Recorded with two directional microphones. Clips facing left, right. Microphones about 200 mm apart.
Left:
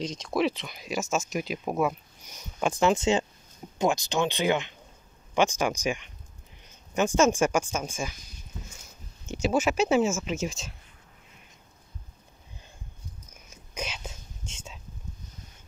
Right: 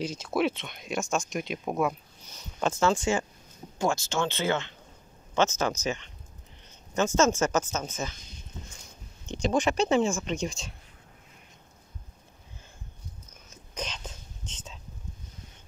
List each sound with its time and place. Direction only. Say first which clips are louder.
0.0 s speech: even; 5° right (ahead or behind); by 8.2 s 10° left (ahead or behind)
9.2 s speech: left 1 dB; 5° left (ahead or behind)
13.3 s whispering: left 1 dB; 10° left (ahead or behind)